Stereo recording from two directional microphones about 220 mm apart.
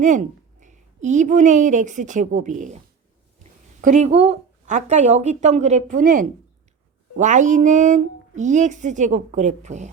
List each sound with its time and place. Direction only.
0.0 s a woman's voice: 35° right (ahead or behind)